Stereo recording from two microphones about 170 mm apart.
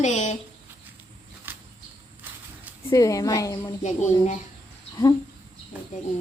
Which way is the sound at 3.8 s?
45° left (ahead or behind).